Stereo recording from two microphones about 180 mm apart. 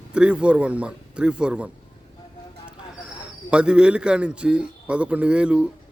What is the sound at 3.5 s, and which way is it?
A man's voice, 5° right (ahead or behind).